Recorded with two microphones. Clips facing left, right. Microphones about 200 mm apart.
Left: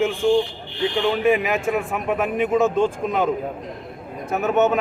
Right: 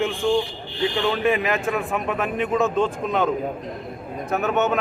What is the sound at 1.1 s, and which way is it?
A man's voice, 5° left (ahead or behind).